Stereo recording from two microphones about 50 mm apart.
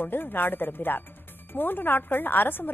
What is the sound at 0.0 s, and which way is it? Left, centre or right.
A woman's voice, left.